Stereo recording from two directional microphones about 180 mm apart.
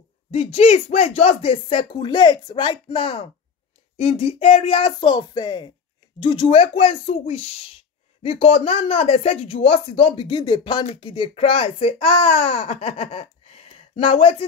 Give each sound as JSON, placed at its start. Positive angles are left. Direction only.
{"t": 0.3, "sound": "speech", "side_deg": 35}